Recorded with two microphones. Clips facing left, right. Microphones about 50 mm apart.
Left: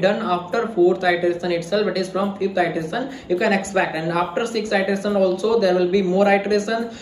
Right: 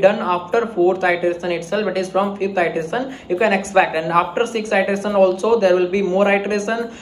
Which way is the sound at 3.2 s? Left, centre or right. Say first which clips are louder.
Right 2 dB; right.